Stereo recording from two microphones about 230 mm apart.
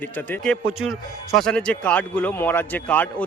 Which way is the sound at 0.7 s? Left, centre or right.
Right.